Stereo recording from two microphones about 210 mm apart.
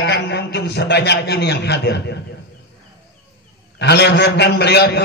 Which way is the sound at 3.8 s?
50° left (ahead or behind).